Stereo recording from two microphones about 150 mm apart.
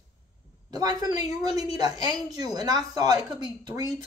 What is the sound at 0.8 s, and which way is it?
Speech, 25° right (ahead or behind).